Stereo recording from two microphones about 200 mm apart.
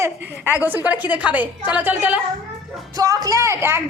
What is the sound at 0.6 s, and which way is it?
A woman's voice, 10° right (ahead or behind).